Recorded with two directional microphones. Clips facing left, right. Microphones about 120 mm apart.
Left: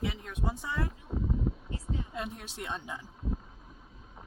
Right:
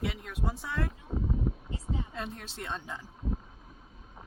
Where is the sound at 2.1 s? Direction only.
15° left (ahead or behind).